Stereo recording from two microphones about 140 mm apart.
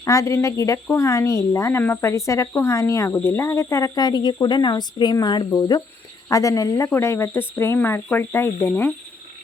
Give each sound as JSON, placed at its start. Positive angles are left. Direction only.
{"t": 0.0, "sound": "speech", "side_deg": 20}